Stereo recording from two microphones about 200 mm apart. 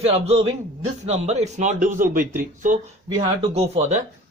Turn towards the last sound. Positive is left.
turn(degrees=-35)  # may be behind; listen again after turning